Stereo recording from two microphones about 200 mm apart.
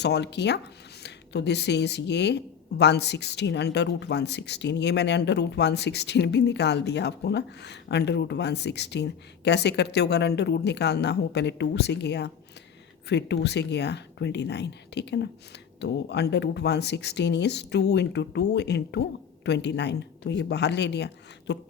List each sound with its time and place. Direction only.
0.0 s speech: 60° left (ahead or behind)